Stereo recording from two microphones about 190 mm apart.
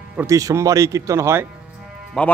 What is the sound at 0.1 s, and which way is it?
Speech, 15° right (ahead or behind).